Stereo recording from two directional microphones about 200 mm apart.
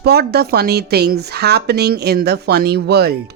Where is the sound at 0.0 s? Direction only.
50° right (ahead or behind).